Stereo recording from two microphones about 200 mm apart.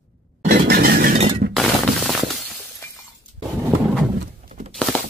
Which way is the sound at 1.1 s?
30° right (ahead or behind).